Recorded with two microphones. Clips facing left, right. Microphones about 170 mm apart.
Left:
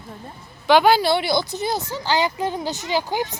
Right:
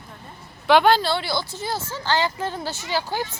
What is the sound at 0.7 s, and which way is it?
A woman's voice, 5° left (ahead or behind).